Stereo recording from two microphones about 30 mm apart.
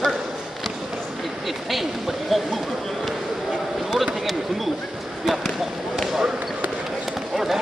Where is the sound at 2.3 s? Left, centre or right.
Centre.